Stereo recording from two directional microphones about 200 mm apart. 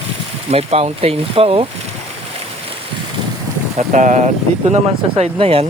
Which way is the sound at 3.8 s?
40° right (ahead or behind).